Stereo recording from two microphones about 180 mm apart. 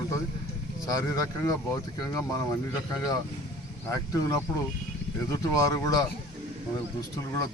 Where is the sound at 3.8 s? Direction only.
15° left (ahead or behind).